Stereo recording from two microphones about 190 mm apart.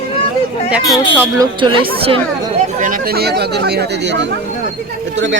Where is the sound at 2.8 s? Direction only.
45° right (ahead or behind); by 4.3 s 65° right (ahead or behind).